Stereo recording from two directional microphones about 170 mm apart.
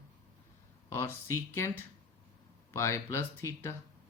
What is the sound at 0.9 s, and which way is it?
Speech, 15° left (ahead or behind).